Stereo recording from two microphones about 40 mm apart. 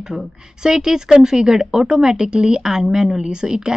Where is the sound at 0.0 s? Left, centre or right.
Centre.